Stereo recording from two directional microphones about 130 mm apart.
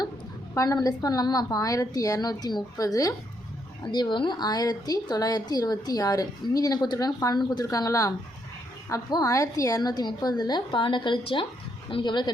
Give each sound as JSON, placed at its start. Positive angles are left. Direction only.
{"t": 0.5, "sound": "a woman's voice", "side_deg": 30}
{"t": 3.9, "sound": "a woman's voice", "side_deg": 35}